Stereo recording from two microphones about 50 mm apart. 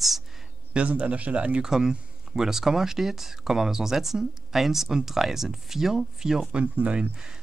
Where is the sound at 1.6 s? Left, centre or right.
Centre.